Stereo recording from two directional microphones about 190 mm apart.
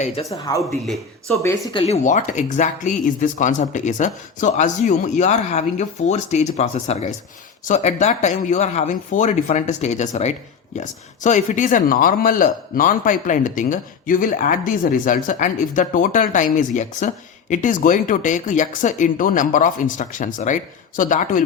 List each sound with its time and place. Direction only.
0.3 s speech: 20° left (ahead or behind)
0.7 s a man's voice: centre (ahead or behind)
1.4 s speech: 15° left (ahead or behind)
1.7 s speech: 35° left (ahead or behind)